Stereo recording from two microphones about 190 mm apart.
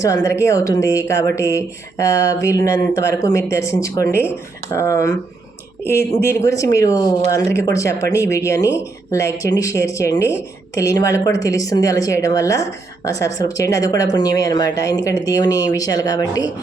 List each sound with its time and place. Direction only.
0.0 s speech: 15° left (ahead or behind)
6.3 s speech: 15° left (ahead or behind)